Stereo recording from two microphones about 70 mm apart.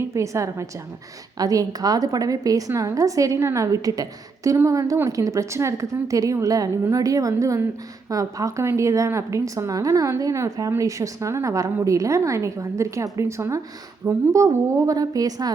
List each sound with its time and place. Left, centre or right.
0.0 s a woman's voice: right
1.4 s a woman's voice: right
4.5 s a woman's voice: right